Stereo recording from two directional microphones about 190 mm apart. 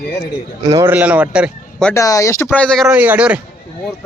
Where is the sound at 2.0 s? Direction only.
15° left (ahead or behind).